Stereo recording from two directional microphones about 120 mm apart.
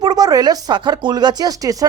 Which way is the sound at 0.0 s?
35° right (ahead or behind).